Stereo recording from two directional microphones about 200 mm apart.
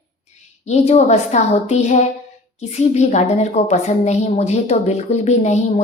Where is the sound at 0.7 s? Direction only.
35° left (ahead or behind).